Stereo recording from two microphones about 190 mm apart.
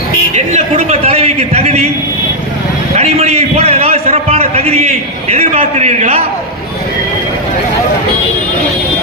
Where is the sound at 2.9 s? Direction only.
35° right (ahead or behind).